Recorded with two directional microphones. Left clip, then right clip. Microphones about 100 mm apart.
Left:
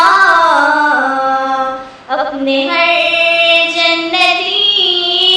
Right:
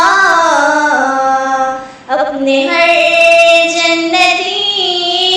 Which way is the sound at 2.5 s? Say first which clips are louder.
Right 2 dB; 50° right (ahead or behind).